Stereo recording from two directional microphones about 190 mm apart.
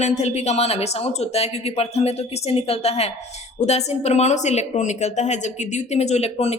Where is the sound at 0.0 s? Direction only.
35° left (ahead or behind).